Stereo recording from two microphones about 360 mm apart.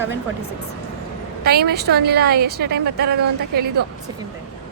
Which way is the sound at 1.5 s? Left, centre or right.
Right.